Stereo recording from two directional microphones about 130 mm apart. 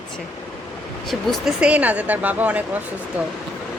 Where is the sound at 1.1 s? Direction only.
Centre (ahead or behind).